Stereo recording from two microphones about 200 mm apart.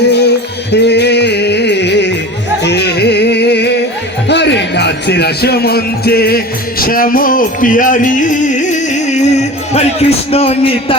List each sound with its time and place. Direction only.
0.1 s music: 55° left (ahead or behind)
4.3 s speech: 60° left (ahead or behind); by 10.9 s 25° left (ahead or behind)